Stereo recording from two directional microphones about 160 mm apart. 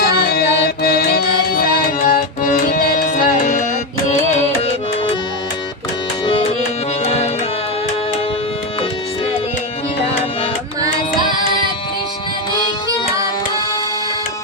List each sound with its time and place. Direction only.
0.0 s music: 75° left (ahead or behind); by 4.7 s 45° left (ahead or behind)
6.2 s music: 35° left (ahead or behind)